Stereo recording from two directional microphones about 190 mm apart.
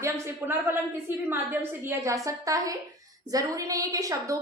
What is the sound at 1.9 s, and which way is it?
A woman's voice, 15° right (ahead or behind).